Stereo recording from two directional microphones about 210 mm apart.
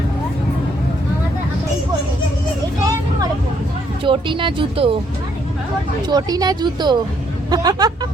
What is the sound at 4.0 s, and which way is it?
Speech, 25° right (ahead or behind).